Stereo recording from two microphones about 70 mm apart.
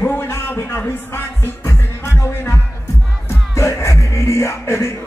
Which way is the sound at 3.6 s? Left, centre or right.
Left.